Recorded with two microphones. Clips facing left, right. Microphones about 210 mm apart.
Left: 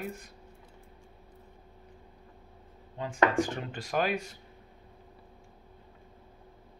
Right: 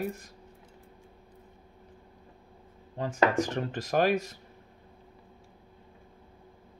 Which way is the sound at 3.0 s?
40° right (ahead or behind).